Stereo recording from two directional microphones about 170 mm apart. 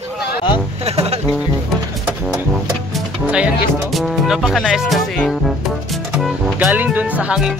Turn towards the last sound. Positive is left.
turn(degrees=-5)  # may be behind; listen again after turning